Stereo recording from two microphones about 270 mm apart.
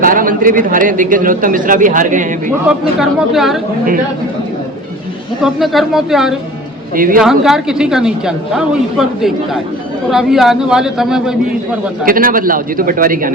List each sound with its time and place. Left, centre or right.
0.0 s a man's voice: right
2.6 s a woman's voice: centre
5.4 s a woman's voice: centre
6.9 s a man's voice: right
7.2 s a woman's voice: centre
12.0 s a man's voice: right